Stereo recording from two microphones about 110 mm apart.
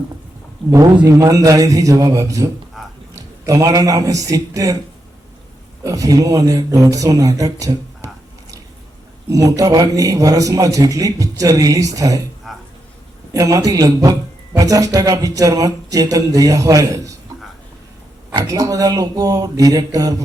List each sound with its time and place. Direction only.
1.0 s a man's voice: 30° right (ahead or behind)
2.8 s a sound: centre (ahead or behind)
3.2 s speech: 30° right (ahead or behind)
5.8 s a man's voice: 30° right (ahead or behind)
9.3 s a man's voice: 30° right (ahead or behind)
12.5 s dishes: centre (ahead or behind)
13.3 s a man's voice: 30° right (ahead or behind)
18.4 s a man's voice: 30° right (ahead or behind)